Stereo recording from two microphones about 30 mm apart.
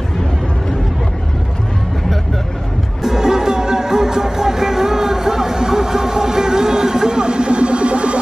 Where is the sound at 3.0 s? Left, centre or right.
Centre.